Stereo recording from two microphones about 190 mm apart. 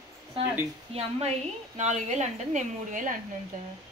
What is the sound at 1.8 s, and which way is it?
A woman's voice, 40° right (ahead or behind).